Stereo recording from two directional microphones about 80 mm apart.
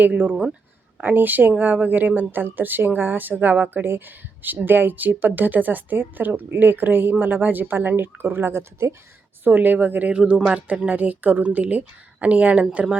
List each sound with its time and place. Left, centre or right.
0.0 s a woman's voice: right